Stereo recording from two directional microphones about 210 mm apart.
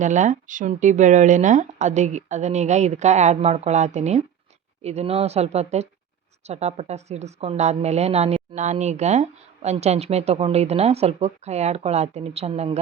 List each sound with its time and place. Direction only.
0.0 s a woman's voice: 35° right (ahead or behind)